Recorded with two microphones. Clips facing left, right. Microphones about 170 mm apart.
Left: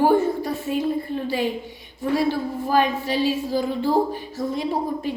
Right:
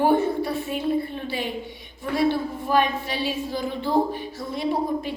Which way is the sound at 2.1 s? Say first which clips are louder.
Even; 40° left (ahead or behind).